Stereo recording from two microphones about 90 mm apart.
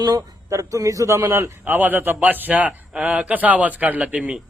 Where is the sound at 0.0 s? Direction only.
45° right (ahead or behind).